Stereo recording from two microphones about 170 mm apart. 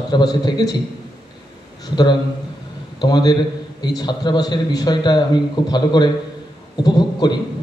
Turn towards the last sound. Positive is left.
turn(degrees=25)  # may be behind; listen again after turning